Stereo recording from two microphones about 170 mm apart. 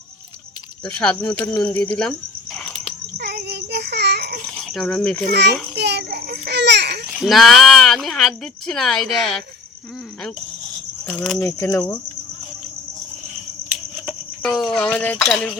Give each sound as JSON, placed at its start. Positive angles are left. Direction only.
{"t": 0.9, "sound": "a sound", "side_deg": 5}
{"t": 2.0, "sound": "cricket", "side_deg": 5}
{"t": 3.2, "sound": "child singing", "side_deg": -75}
{"t": 4.5, "sound": "speech", "side_deg": 0}
{"t": 5.3, "sound": "a child's voice", "side_deg": -75}
{"t": 7.1, "sound": "speech", "side_deg": 0}
{"t": 11.0, "sound": "cricket", "side_deg": 5}
{"t": 11.4, "sound": "cricket", "side_deg": 20}
{"t": 14.4, "sound": "speech", "side_deg": 0}
{"t": 14.8, "sound": "a sound", "side_deg": 5}